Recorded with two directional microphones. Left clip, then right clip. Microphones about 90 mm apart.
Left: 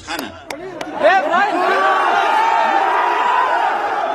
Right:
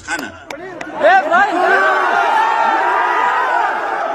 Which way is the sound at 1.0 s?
30° right (ahead or behind).